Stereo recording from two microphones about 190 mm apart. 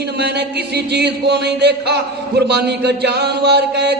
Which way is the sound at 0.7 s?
60° right (ahead or behind).